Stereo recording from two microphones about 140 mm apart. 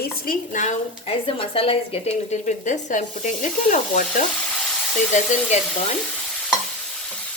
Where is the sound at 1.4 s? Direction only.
40° left (ahead or behind).